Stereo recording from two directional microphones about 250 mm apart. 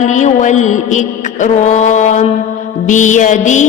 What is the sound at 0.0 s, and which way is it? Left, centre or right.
Mantra, left.